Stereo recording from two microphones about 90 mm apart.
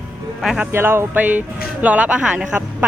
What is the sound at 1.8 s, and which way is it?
Speech, 15° right (ahead or behind).